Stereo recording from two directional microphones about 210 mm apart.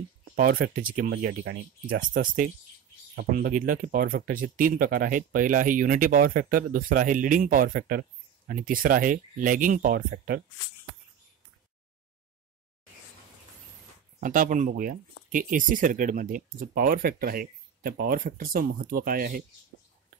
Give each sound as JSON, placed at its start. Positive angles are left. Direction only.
{"t": 0.2, "sound": "speech", "side_deg": -45}
{"t": 2.0, "sound": "speech", "side_deg": -40}
{"t": 14.2, "sound": "speech", "side_deg": -40}